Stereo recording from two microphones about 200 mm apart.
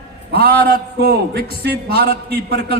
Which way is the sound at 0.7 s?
50° right (ahead or behind).